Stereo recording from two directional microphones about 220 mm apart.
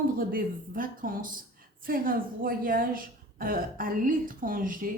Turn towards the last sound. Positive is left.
turn(degrees=-40)  # may be behind; listen again after turning